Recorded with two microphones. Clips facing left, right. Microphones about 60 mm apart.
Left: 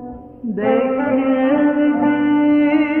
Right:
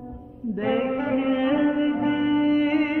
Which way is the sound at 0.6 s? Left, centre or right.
Left.